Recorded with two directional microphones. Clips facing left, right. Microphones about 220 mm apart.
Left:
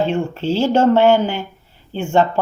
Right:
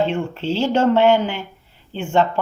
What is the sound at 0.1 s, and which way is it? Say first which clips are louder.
A woman's voice: left 3 dB; 45° left (ahead or behind).